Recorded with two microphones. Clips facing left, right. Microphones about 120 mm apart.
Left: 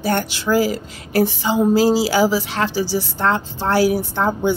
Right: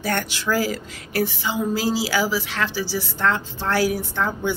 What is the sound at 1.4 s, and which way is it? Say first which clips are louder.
A woman's voice: left 8 dB; 35° left (ahead or behind).